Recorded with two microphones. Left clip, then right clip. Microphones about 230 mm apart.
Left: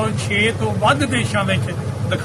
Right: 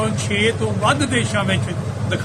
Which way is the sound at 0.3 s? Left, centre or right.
Centre.